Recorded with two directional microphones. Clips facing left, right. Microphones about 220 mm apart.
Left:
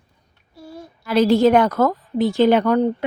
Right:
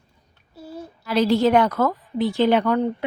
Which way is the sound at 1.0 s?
50° left (ahead or behind).